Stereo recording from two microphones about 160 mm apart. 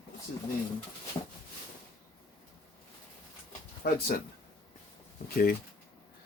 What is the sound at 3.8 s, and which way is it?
Speech, 75° left (ahead or behind).